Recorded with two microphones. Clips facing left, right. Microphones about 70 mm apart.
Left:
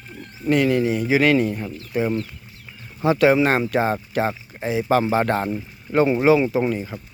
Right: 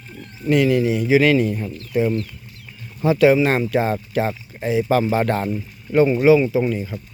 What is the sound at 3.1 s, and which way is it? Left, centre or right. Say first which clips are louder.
Speech: right 2 dB; left.